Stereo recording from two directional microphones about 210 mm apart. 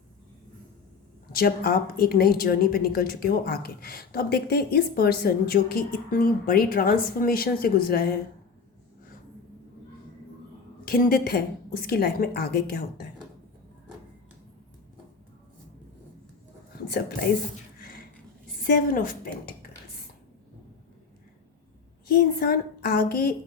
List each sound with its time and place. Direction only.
1.3 s a woman's voice: 45° left (ahead or behind)
10.8 s a woman's voice: 45° left (ahead or behind)
17.7 s a sound: 45° left (ahead or behind)
18.6 s a woman's voice: 40° left (ahead or behind)
22.1 s a woman's voice: 45° left (ahead or behind)